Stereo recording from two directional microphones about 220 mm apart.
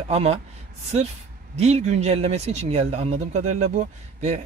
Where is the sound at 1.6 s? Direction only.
30° right (ahead or behind).